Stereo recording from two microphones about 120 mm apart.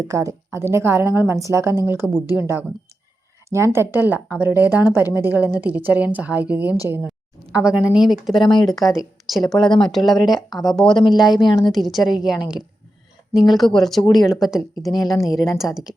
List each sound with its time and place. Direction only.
0.1 s a woman's voice: 25° right (ahead or behind)
7.5 s speech: 5° right (ahead or behind)
8.8 s a woman's voice: 25° left (ahead or behind)
9.2 s speech: centre (ahead or behind)
10.9 s speech: 40° left (ahead or behind)
11.7 s speech: centre (ahead or behind)
15.1 s a woman's voice: 30° left (ahead or behind)
15.5 s speech: 5° right (ahead or behind)